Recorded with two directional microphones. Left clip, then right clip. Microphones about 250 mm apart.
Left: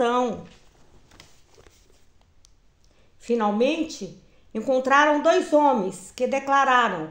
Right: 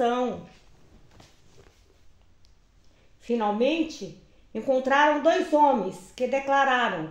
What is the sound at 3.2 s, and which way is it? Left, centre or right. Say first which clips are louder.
A woman's voice: left 3 dB; left.